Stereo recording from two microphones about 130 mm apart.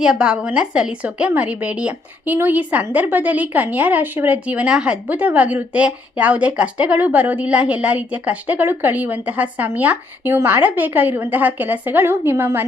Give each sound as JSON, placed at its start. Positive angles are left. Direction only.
{"t": 0.0, "sound": "a woman's voice", "side_deg": -5}